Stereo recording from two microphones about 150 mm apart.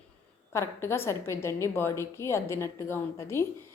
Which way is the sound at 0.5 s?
20° left (ahead or behind).